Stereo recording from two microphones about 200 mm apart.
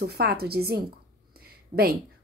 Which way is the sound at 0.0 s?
55° right (ahead or behind).